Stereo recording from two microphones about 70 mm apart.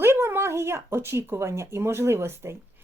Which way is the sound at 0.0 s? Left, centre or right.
Right.